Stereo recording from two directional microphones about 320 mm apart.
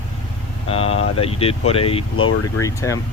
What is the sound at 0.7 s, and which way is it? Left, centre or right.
Speech, centre.